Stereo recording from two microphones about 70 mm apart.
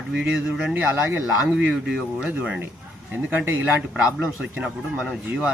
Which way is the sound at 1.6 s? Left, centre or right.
Centre.